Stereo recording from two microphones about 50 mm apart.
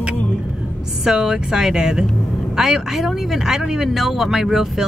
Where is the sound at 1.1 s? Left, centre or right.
Centre.